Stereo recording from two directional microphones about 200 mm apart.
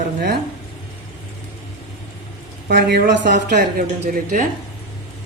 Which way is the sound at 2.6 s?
55° right (ahead or behind).